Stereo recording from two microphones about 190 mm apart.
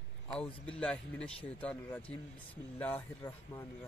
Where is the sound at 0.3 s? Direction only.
5° left (ahead or behind).